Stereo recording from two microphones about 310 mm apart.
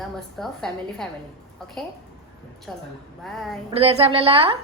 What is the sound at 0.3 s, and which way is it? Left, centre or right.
Speech, centre.